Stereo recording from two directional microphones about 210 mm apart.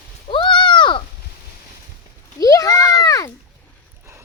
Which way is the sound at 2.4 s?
15° left (ahead or behind).